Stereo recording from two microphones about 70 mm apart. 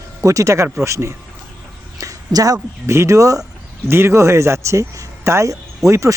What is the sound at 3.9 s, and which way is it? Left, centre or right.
Speech, right.